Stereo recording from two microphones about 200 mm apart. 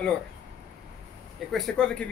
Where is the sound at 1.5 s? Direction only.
5° left (ahead or behind).